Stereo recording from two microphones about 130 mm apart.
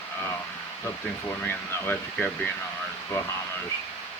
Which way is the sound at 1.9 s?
10° left (ahead or behind).